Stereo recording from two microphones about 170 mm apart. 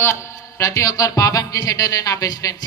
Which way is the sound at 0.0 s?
15° left (ahead or behind).